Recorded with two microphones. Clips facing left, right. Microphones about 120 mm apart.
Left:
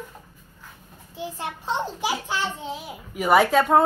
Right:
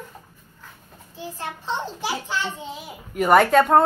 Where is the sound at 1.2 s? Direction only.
15° left (ahead or behind).